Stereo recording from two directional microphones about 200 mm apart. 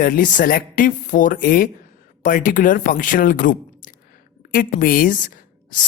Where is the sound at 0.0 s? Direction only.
45° left (ahead or behind).